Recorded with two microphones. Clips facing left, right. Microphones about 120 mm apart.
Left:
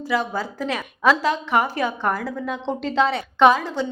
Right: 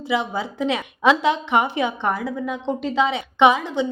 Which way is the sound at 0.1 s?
20° right (ahead or behind).